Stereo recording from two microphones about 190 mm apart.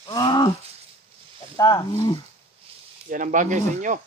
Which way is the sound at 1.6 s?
20° left (ahead or behind).